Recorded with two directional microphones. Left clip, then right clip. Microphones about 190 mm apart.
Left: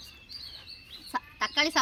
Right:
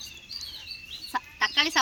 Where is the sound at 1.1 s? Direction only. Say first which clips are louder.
Right 4 dB; 65° left (ahead or behind).